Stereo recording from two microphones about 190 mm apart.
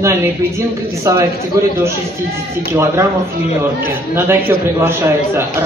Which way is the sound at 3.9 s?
10° right (ahead or behind).